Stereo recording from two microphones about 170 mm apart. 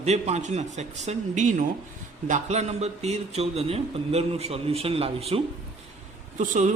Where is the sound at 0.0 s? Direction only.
40° right (ahead or behind).